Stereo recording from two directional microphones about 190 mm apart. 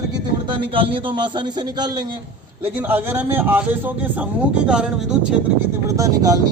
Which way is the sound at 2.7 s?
10° right (ahead or behind).